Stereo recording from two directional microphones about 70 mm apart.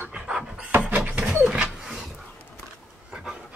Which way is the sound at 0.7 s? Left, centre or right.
Right.